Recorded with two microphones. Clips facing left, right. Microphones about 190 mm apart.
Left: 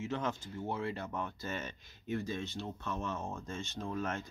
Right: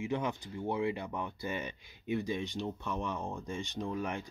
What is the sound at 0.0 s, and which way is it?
Speech, 15° right (ahead or behind).